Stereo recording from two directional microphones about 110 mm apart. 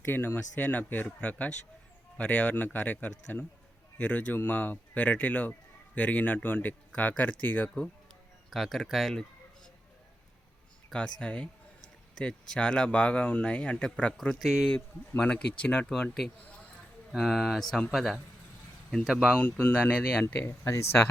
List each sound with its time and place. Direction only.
0.0 s speech: 20° left (ahead or behind)
8.4 s speech: centre (ahead or behind)
11.2 s speech: 10° left (ahead or behind)
14.7 s speech: 10° left (ahead or behind); by 19.4 s 5° right (ahead or behind)
19.4 s speech: 20° left (ahead or behind)
20.2 s speech: 20° left (ahead or behind)